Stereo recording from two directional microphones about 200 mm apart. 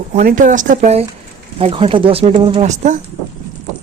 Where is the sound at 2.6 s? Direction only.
35° right (ahead or behind).